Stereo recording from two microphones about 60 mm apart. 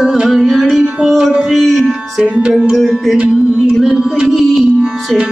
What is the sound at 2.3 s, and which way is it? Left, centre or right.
Music, centre.